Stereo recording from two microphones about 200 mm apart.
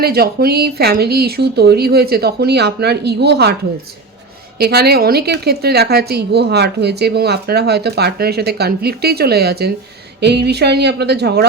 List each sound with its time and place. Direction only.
0.0 s a woman's voice: 50° right (ahead or behind)
4.5 s a woman's voice: 50° right (ahead or behind)